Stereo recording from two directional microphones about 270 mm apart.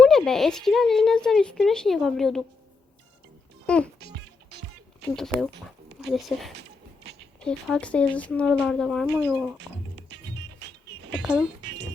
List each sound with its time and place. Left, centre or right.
0.0 s speech: centre
3.7 s a child's voice: centre
5.0 s speech: centre
6.6 s a sound: right
7.4 s speech: centre
9.6 s music: right
11.2 s speech: centre